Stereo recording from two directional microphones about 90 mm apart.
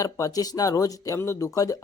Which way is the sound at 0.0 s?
40° left (ahead or behind).